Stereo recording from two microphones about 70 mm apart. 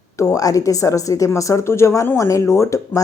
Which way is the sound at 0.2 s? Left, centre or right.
Left.